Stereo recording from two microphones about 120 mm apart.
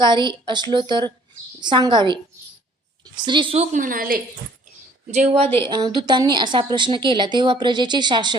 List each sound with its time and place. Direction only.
0.0 s a woman's voice: 40° right (ahead or behind)
3.2 s a woman's voice: 40° right (ahead or behind)
3.6 s a woman's voice: 80° right
5.1 s speech: 65° right (ahead or behind)
5.6 s a woman's voice: 40° right (ahead or behind)